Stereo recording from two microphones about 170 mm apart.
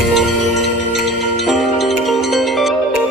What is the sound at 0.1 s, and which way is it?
Music, centre (ahead or behind).